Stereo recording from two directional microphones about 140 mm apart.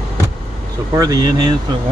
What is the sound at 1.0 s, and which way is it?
Speech, 30° right (ahead or behind).